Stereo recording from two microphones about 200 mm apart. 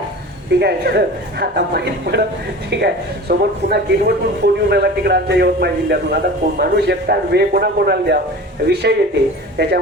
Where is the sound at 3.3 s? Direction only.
55° right (ahead or behind).